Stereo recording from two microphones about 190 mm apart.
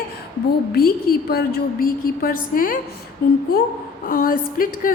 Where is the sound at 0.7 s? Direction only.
50° left (ahead or behind).